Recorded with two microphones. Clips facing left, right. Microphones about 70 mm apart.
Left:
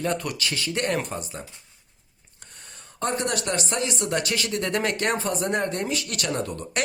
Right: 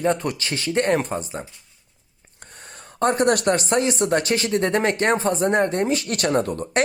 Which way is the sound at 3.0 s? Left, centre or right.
Right.